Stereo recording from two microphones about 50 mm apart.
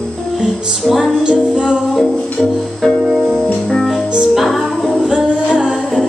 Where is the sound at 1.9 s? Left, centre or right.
Centre.